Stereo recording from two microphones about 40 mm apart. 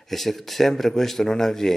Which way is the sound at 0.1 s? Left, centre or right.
Centre.